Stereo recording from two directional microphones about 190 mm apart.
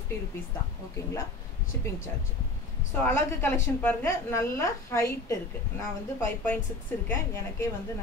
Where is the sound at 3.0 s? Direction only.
15° left (ahead or behind).